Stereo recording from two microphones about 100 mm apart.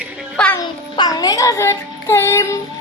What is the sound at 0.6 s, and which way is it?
Child singing, 40° left (ahead or behind).